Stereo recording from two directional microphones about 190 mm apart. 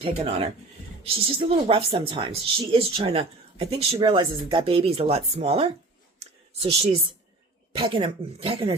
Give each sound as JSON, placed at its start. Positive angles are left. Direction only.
{"t": 0.0, "sound": "speech", "side_deg": -30}
{"t": 6.1, "sound": "a sound", "side_deg": -35}
{"t": 7.7, "sound": "speech", "side_deg": -25}